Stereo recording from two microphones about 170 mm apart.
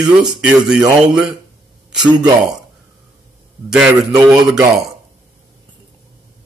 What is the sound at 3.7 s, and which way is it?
Speech, 5° right (ahead or behind).